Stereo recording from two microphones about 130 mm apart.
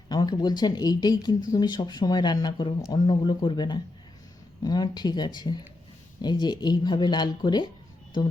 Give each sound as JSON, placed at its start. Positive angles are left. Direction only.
{"t": 0.1, "sound": "speech", "side_deg": 30}